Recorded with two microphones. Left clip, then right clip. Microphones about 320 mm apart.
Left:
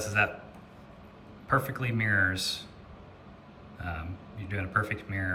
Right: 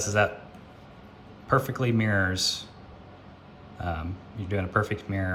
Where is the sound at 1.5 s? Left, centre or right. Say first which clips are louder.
Right 4 dB; centre.